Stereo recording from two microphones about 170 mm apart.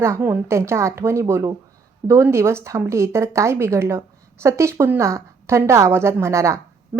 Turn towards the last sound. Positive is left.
turn(degrees=-15)  # may be behind; listen again after turning